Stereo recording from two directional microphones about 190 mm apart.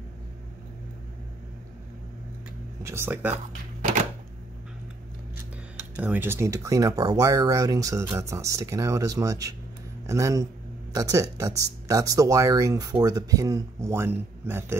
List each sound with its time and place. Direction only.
2.8 s speech: 15° right (ahead or behind)
5.8 s speech: 10° right (ahead or behind)